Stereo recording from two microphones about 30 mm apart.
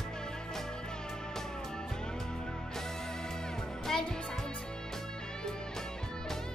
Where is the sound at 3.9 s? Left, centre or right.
Centre.